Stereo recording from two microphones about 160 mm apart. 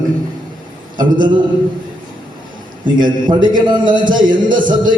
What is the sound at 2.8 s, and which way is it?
A man's voice, 30° right (ahead or behind).